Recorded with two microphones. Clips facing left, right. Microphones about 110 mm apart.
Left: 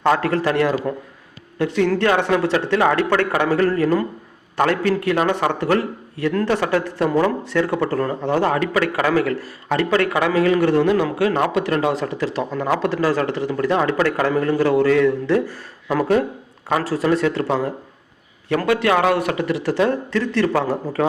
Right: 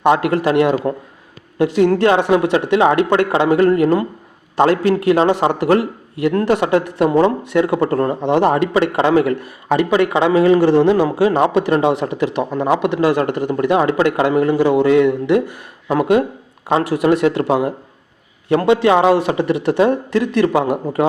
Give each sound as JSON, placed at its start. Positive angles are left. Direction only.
{"t": 0.0, "sound": "speech", "side_deg": -20}
{"t": 13.3, "sound": "speech", "side_deg": -50}
{"t": 13.6, "sound": "speech", "side_deg": -20}